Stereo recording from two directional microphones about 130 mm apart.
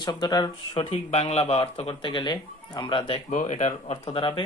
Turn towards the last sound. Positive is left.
turn(degrees=45)  # may be behind; listen again after turning